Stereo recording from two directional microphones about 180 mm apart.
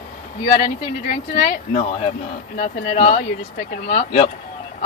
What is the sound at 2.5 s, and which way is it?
Speech, 35° left (ahead or behind).